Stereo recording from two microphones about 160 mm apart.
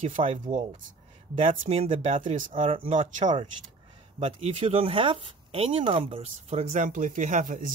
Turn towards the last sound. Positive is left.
turn(degrees=-55)  # may be behind; listen again after turning